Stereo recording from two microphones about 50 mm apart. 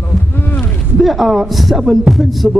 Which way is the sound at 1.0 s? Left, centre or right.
Centre.